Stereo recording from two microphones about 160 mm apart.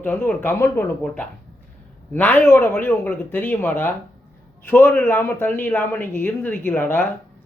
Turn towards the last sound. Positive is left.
turn(degrees=10)  # may be behind; listen again after turning